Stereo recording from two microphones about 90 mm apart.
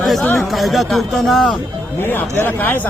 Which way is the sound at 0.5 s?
Centre (ahead or behind).